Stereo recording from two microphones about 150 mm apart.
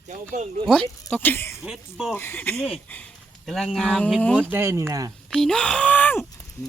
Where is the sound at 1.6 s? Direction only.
5° right (ahead or behind).